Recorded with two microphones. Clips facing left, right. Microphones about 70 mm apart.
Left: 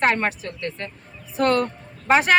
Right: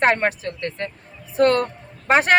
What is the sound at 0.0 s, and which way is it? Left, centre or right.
Speech, right.